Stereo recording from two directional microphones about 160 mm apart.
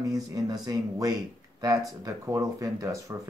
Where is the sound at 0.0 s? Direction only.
20° right (ahead or behind).